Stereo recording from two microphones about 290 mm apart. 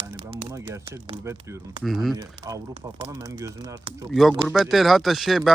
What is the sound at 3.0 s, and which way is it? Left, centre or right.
Speech, centre.